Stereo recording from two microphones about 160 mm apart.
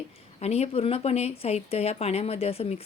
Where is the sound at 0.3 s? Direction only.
40° left (ahead or behind).